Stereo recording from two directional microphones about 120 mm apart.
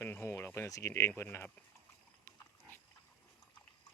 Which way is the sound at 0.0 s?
20° left (ahead or behind).